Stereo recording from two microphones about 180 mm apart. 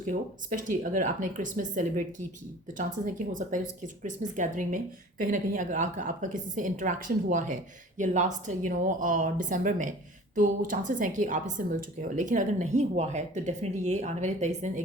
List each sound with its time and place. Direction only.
0.1 s speech: 50° right (ahead or behind)